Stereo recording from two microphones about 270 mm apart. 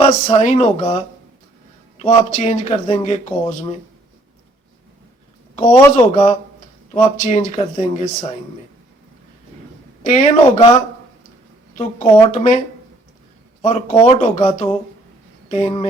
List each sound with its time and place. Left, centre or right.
0.0 s speech: left
5.5 s speech: left
10.0 s speech: left
12.3 s speech: left
13.6 s speech: left